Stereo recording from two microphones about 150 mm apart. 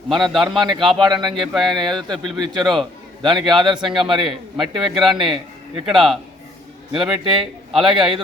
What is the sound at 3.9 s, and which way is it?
Speech, 35° right (ahead or behind).